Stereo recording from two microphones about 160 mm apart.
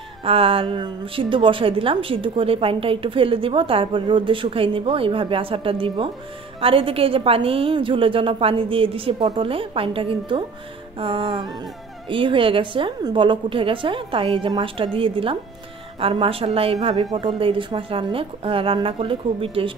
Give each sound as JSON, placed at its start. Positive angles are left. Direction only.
{"t": 0.2, "sound": "a woman's voice", "side_deg": -35}